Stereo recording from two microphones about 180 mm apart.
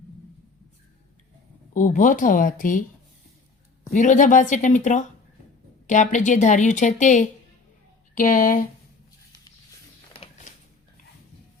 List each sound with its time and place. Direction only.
1.7 s speech: 45° left (ahead or behind)
3.9 s speech: 45° left (ahead or behind)